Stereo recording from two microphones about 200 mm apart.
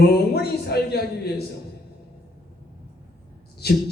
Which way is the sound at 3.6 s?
55° left (ahead or behind).